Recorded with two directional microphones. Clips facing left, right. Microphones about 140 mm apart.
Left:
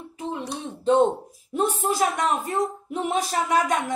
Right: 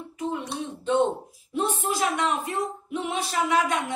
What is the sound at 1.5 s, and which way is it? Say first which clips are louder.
A woman's voice: left 3 dB; 40° left (ahead or behind).